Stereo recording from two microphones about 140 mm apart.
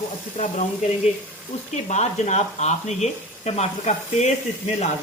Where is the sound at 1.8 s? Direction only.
55° left (ahead or behind).